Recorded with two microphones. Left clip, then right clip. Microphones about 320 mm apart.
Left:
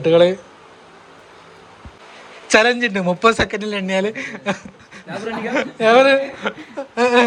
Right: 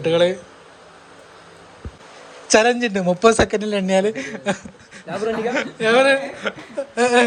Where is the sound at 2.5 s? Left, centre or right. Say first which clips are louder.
Left 1 dB; centre.